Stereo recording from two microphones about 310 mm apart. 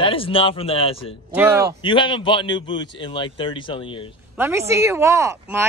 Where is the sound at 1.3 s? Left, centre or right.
Centre.